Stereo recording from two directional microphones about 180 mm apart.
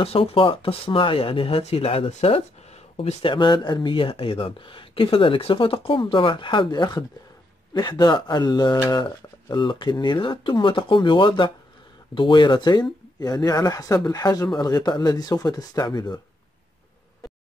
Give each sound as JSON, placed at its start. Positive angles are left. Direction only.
{"t": 0.0, "sound": "speech", "side_deg": 30}